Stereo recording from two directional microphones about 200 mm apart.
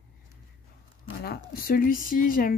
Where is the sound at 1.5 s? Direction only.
45° left (ahead or behind).